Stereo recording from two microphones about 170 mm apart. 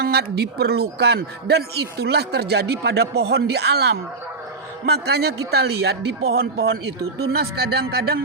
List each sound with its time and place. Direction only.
0.0 s a man's voice: 70° right (ahead or behind)